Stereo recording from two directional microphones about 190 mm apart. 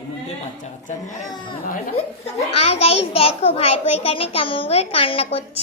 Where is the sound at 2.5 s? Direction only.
30° left (ahead or behind).